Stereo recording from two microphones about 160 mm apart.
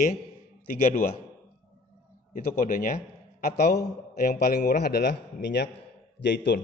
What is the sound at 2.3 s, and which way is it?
Speech, 60° left (ahead or behind).